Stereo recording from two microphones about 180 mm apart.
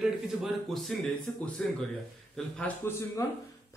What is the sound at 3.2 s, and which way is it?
Speech, 20° left (ahead or behind).